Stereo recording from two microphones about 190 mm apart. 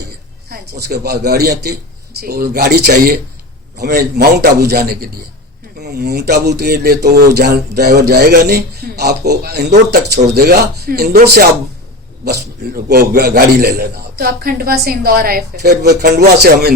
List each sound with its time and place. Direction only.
0.4 s speech: 60° right (ahead or behind)